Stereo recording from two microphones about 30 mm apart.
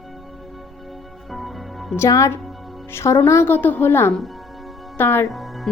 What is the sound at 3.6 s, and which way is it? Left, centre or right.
Speech, left.